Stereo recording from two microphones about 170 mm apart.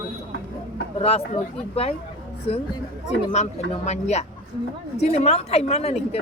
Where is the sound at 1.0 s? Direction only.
35° left (ahead or behind).